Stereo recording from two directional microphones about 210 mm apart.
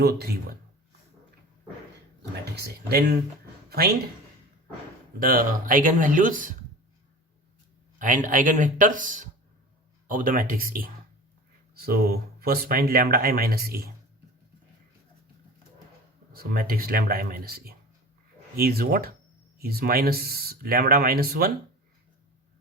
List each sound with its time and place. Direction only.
0.0 s speech: 50° right (ahead or behind)
3.7 s speech: 45° right (ahead or behind)
5.2 s speech: 40° right (ahead or behind)
7.9 s speech: 40° right (ahead or behind)
16.3 s speech: 45° right (ahead or behind)